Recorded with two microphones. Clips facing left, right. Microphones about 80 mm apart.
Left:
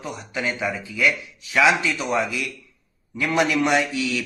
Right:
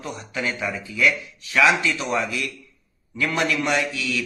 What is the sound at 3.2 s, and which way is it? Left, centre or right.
A man's voice, centre.